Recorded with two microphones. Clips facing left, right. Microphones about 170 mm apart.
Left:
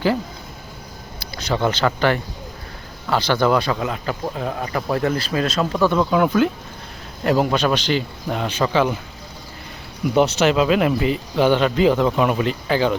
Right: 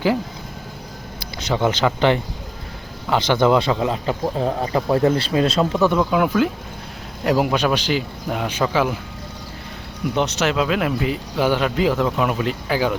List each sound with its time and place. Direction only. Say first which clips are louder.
1.2 s speech: right 1 dB; 20° right (ahead or behind)
5.8 s speech: left 2 dB; 10° right (ahead or behind)
10.4 s speech: left 3 dB; centre (ahead or behind)